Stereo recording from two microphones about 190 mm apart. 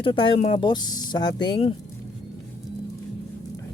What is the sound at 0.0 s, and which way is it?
Speech, 25° left (ahead or behind).